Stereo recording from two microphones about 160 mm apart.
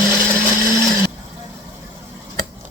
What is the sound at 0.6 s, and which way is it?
Blender, 15° right (ahead or behind).